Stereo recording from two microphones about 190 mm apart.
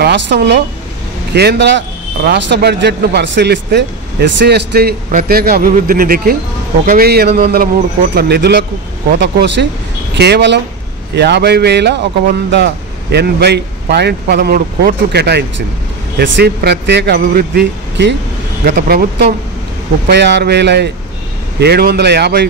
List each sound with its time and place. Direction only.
0.0 s speech: 65° right (ahead or behind)